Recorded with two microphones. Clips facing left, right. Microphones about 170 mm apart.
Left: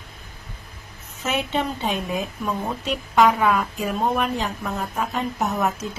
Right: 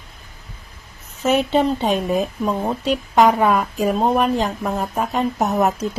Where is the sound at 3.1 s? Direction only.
40° right (ahead or behind).